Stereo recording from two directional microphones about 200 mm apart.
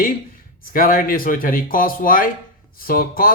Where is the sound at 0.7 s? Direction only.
45° left (ahead or behind).